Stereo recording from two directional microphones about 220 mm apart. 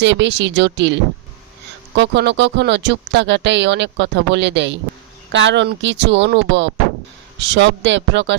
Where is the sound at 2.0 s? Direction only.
50° right (ahead or behind).